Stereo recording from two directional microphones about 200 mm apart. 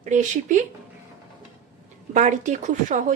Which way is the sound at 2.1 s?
40° right (ahead or behind).